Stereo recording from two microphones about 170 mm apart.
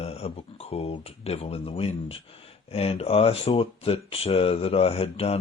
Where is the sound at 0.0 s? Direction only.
35° left (ahead or behind).